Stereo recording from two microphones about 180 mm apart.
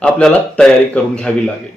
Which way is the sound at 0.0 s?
5° left (ahead or behind).